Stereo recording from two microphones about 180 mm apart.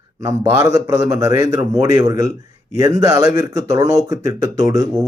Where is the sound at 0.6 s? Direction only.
15° right (ahead or behind).